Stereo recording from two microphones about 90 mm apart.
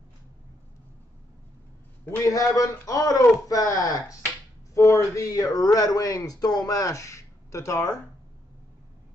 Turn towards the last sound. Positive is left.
turn(degrees=40)  # may be behind; listen again after turning